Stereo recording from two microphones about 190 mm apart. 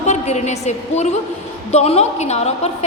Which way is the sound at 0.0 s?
35° left (ahead or behind).